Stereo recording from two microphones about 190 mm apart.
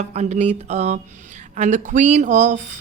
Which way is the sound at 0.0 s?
35° right (ahead or behind).